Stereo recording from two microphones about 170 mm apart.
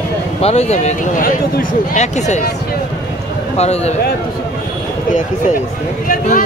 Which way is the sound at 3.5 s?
40° left (ahead or behind).